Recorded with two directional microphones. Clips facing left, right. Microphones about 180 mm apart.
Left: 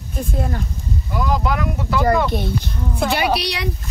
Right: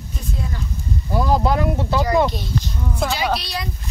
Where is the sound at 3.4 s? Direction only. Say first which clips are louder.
Left 4 dB; 70° left (ahead or behind).